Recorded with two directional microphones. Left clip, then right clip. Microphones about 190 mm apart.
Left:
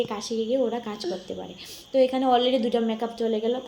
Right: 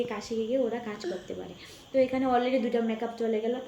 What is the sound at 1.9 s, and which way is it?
A woman's voice, 35° left (ahead or behind).